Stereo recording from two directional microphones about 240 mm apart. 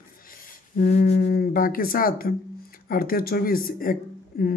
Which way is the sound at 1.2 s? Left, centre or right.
Left.